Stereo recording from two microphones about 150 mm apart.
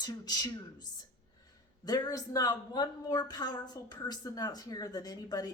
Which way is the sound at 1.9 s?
25° left (ahead or behind).